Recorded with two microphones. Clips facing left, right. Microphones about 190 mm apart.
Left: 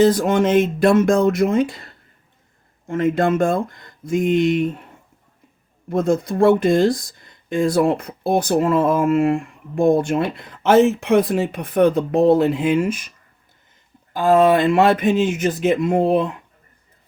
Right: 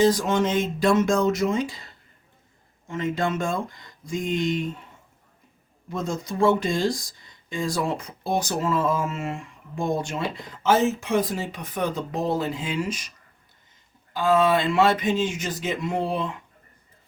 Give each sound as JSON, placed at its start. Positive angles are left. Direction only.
{"t": 0.0, "sound": "speech", "side_deg": 55}
{"t": 5.9, "sound": "speech", "side_deg": 55}
{"t": 14.1, "sound": "speech", "side_deg": 55}